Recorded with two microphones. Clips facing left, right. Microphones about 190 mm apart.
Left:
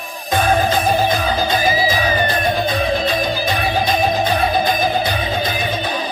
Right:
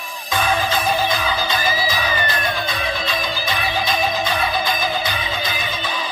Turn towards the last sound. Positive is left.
turn(degrees=50)  # may be behind; listen again after turning